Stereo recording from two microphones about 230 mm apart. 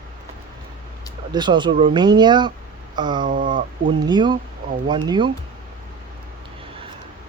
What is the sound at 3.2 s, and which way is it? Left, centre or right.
Speech, right.